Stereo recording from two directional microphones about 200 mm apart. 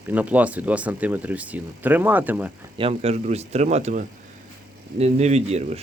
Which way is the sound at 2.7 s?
30° right (ahead or behind).